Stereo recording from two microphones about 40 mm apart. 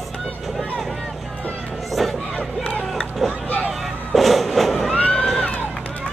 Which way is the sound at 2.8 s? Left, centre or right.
Centre.